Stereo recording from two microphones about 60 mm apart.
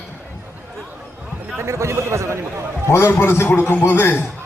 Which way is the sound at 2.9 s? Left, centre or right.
Left.